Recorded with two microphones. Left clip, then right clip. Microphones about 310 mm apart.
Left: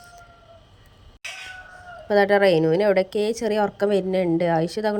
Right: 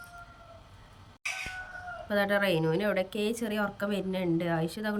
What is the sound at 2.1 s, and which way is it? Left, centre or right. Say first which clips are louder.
A woman's voice: left 10 dB; centre.